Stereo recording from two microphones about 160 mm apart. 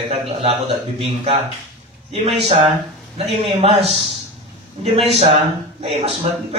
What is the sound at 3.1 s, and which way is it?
A man's voice, 40° right (ahead or behind).